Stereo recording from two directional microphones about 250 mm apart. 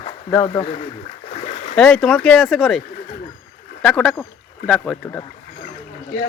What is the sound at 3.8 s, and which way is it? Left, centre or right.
Speech, centre.